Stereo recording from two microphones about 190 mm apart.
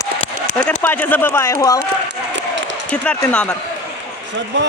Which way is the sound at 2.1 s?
70° right (ahead or behind).